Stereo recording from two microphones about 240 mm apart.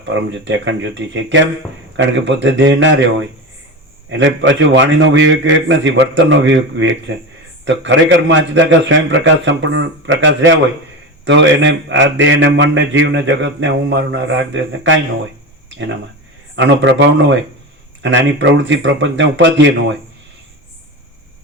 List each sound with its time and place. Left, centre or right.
0.0 s a man's voice: right
4.1 s a man's voice: right
16.6 s a man's voice: right